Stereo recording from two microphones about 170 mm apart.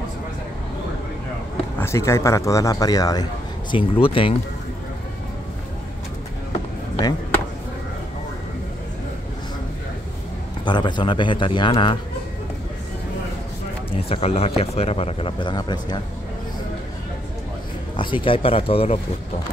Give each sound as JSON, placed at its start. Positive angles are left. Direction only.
{"t": 1.8, "sound": "speech", "side_deg": 15}
{"t": 3.7, "sound": "speech", "side_deg": 30}
{"t": 10.6, "sound": "speech", "side_deg": 25}
{"t": 14.0, "sound": "speech", "side_deg": 35}
{"t": 17.9, "sound": "speech", "side_deg": 30}